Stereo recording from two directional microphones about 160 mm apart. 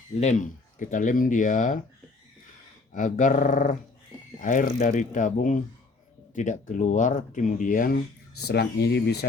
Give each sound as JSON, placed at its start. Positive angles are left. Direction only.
{"t": 0.2, "sound": "speech", "side_deg": 50}
{"t": 2.9, "sound": "speech", "side_deg": 50}
{"t": 8.4, "sound": "speech", "side_deg": 90}